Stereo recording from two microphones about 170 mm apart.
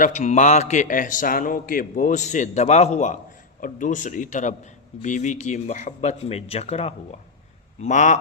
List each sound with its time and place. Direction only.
0.0 s a man's voice: 40° left (ahead or behind)